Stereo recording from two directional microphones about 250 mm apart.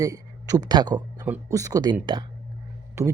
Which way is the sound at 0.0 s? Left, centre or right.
Centre.